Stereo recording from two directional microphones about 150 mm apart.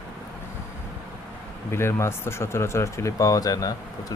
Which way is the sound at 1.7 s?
15° left (ahead or behind).